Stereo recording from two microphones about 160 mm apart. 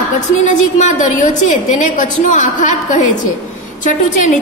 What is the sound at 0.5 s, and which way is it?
A woman's voice, 45° left (ahead or behind).